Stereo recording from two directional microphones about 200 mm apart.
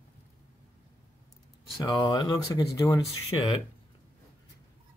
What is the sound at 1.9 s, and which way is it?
Speech, 20° left (ahead or behind).